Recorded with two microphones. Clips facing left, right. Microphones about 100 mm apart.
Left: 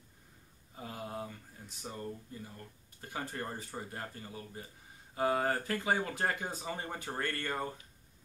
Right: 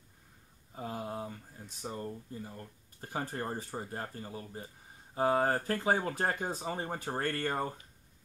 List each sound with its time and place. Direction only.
0.7 s speech: 30° right (ahead or behind)